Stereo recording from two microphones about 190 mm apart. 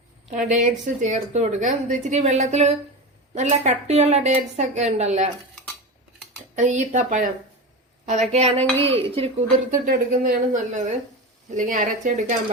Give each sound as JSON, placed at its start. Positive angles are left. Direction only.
{"t": 0.3, "sound": "a woman's voice", "side_deg": -40}
{"t": 6.6, "sound": "a woman's voice", "side_deg": -40}
{"t": 9.8, "sound": "a woman's voice", "side_deg": -45}